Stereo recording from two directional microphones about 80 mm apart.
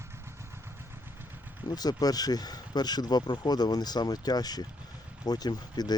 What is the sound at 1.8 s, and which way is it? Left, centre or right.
Speech, left.